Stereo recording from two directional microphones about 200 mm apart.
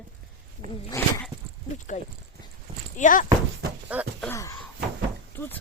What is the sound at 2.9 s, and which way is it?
Speech, 40° left (ahead or behind).